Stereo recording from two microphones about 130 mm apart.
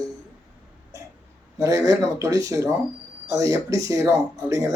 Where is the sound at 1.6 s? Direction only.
25° right (ahead or behind).